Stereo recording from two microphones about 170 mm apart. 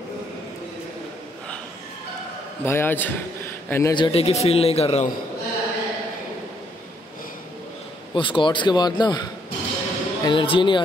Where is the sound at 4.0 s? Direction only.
35° left (ahead or behind).